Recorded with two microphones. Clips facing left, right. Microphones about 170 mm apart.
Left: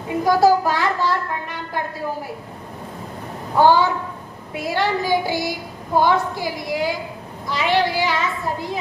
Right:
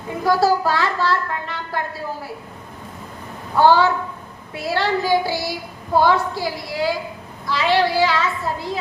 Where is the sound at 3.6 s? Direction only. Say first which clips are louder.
Right 1 dB; 15° left (ahead or behind).